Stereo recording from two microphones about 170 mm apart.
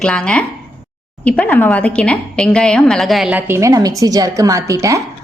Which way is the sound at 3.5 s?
20° right (ahead or behind).